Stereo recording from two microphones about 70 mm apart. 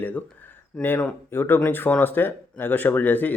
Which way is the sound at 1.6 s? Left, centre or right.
Left.